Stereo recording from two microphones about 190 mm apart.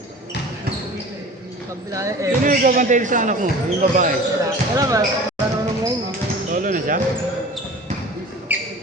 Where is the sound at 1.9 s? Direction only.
15° right (ahead or behind).